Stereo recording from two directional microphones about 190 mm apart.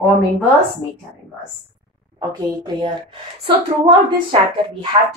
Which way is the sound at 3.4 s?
25° right (ahead or behind).